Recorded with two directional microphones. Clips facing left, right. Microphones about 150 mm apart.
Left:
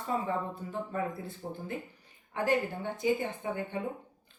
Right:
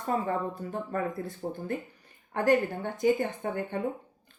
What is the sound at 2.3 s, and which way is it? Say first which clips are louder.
Speech: right 5 dB; 50° right (ahead or behind).